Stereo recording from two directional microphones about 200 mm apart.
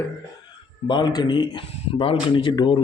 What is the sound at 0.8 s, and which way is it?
Speech, 20° left (ahead or behind).